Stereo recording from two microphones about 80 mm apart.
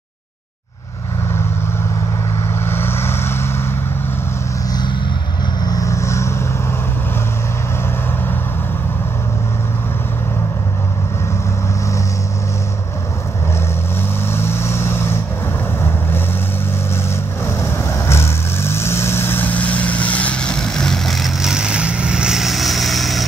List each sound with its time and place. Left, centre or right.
2.6 s vehicle: left
5.6 s vehicle: left
5.9 s vehicle: left
14.2 s vehicle: left
17.5 s vehicle: left; by 23.2 s centre